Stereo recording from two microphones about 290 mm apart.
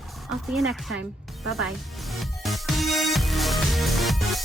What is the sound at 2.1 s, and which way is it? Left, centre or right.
Music, centre.